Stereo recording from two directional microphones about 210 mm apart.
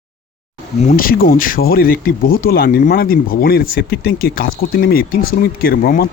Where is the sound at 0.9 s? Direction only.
40° left (ahead or behind).